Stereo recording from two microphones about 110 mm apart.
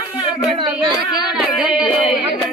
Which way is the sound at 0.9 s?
40° left (ahead or behind).